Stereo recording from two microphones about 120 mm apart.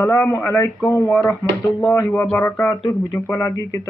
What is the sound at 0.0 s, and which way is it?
Speech, 20° left (ahead or behind).